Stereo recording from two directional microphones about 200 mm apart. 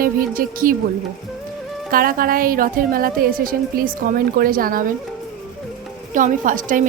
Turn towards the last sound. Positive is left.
turn(degrees=-40)  # may be behind; listen again after turning